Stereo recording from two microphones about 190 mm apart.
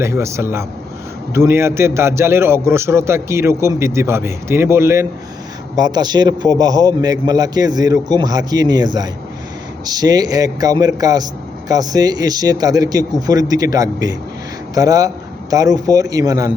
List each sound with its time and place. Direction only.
0.0 s a man's voice: 15° right (ahead or behind)